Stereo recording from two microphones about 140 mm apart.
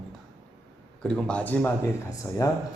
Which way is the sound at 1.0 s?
5° left (ahead or behind).